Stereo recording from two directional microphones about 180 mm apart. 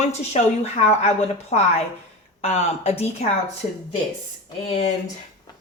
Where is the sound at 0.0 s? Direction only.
40° left (ahead or behind).